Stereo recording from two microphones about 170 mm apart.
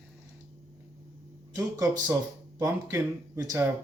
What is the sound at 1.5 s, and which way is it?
Speech, 20° right (ahead or behind).